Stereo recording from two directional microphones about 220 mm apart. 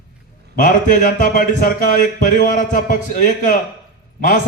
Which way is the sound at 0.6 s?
35° left (ahead or behind).